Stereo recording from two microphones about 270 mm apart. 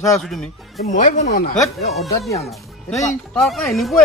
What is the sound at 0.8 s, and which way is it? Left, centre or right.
Speech, left.